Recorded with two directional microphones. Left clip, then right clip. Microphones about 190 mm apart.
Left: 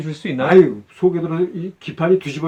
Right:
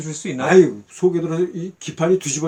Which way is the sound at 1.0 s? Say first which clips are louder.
Left 1 dB; 35° right (ahead or behind).